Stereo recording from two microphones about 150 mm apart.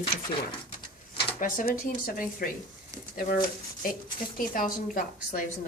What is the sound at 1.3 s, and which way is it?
A woman's voice, 65° left (ahead or behind).